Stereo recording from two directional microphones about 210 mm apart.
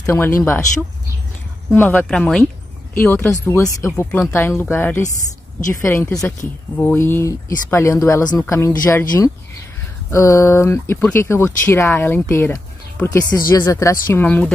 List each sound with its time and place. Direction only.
0.0 s speech: 10° left (ahead or behind)
1.8 s speech: 10° left (ahead or behind)